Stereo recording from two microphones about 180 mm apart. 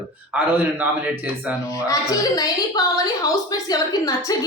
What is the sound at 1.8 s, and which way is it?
Speech, 20° left (ahead or behind).